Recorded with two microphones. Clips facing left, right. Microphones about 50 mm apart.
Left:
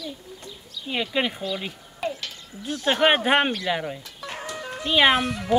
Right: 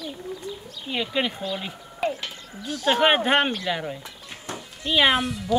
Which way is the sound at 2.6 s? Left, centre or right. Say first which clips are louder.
Left 1 dB; left.